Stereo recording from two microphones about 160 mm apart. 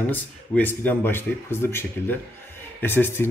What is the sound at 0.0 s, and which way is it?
Speech, 10° left (ahead or behind).